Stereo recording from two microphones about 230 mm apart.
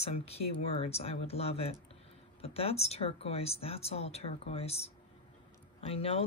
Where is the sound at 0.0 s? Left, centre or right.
Left.